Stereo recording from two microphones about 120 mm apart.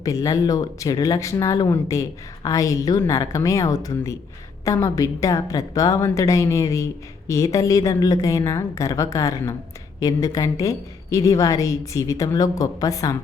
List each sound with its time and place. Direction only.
0.0 s a woman's voice: 30° left (ahead or behind)